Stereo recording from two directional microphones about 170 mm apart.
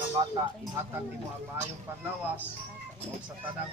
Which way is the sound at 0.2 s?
30° right (ahead or behind).